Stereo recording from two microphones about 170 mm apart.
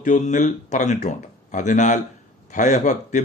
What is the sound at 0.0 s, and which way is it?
Speech, 45° left (ahead or behind).